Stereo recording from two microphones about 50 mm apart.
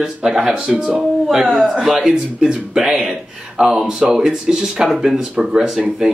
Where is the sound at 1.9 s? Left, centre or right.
Centre.